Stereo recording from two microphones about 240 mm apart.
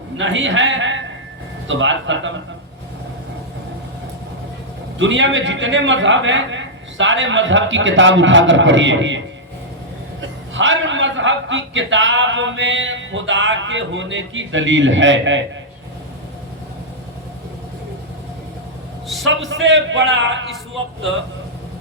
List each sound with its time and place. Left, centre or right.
0.2 s a man's voice: right
4.9 s a man's voice: right
19.0 s a sound: centre
19.5 s a man's voice: right